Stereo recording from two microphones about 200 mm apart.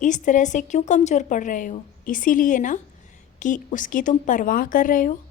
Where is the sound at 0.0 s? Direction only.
40° left (ahead or behind).